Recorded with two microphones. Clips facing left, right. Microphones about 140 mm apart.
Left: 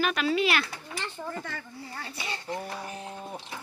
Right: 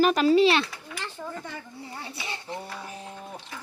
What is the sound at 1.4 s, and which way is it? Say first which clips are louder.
Speech: right 1 dB; 20° right (ahead or behind).